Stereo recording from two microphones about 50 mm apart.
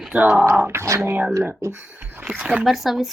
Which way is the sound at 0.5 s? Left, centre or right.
Right.